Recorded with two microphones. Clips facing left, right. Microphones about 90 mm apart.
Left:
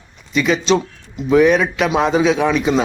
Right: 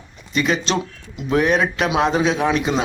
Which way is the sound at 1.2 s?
Centre (ahead or behind).